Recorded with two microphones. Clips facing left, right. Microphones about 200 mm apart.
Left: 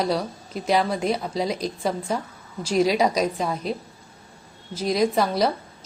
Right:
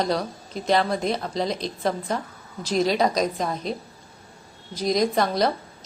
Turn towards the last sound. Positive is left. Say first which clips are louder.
# left 1 dB
turn(degrees=10)  # may be behind; listen again after turning